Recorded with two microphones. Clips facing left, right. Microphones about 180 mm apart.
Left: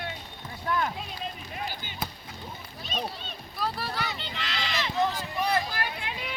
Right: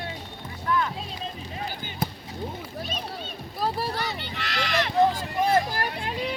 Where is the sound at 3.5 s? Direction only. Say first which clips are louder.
Right 4 dB; 40° right (ahead or behind).